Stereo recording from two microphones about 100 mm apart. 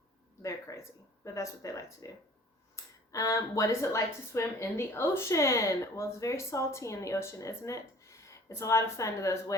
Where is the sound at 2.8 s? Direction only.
30° left (ahead or behind).